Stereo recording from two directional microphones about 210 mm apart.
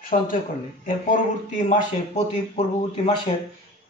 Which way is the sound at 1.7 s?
35° left (ahead or behind).